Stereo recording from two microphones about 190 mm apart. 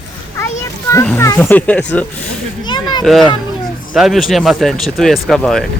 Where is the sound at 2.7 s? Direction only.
20° left (ahead or behind).